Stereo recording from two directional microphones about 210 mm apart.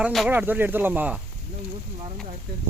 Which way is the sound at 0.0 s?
5° right (ahead or behind).